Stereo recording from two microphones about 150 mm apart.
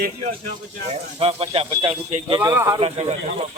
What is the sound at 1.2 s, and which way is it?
Speech, 40° right (ahead or behind).